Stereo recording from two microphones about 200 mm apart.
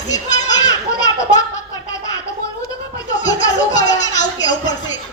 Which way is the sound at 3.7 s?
20° left (ahead or behind).